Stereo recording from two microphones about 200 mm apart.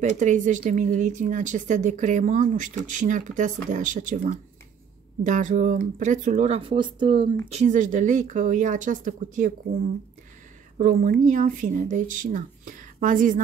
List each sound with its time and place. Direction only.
0.2 s speech: 40° right (ahead or behind)
10.8 s speech: 40° right (ahead or behind)